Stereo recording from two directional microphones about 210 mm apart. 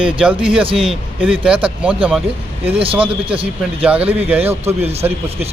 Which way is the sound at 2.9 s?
5° right (ahead or behind).